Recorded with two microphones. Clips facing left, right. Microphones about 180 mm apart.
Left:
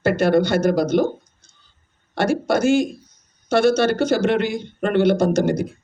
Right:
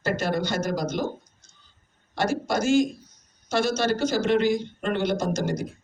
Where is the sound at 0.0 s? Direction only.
60° left (ahead or behind).